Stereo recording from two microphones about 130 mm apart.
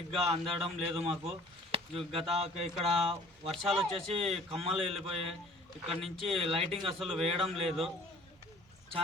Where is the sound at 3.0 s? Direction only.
Centre (ahead or behind).